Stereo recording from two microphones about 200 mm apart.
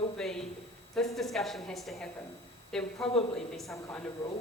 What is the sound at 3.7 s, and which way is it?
Speech, 15° left (ahead or behind).